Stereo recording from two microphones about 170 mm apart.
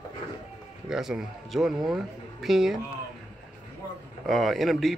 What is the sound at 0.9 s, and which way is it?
Speech, centre (ahead or behind).